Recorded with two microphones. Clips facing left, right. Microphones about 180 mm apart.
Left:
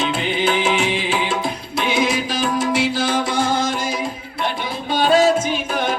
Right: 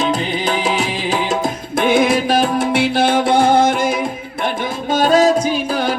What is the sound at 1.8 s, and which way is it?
Music, 55° right (ahead or behind).